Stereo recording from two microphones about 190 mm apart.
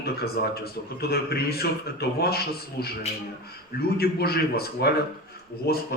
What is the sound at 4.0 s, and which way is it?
A man's voice, 55° left (ahead or behind).